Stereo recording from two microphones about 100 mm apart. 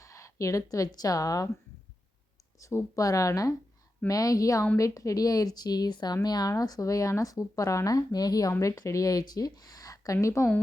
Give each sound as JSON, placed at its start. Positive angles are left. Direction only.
{"t": 0.0, "sound": "a woman's voice", "side_deg": 30}
{"t": 2.6, "sound": "speech", "side_deg": 30}